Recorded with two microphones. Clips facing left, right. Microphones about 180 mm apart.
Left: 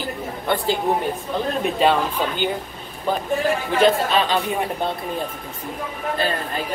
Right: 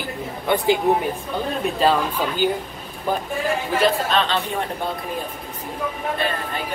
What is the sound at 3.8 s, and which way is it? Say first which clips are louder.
Speech: left 3 dB; 10° left (ahead or behind).